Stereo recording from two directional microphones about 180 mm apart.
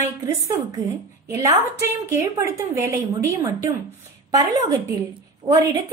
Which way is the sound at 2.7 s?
15° right (ahead or behind).